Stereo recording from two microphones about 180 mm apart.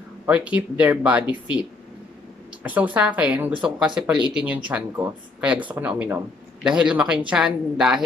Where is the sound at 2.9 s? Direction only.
5° right (ahead or behind).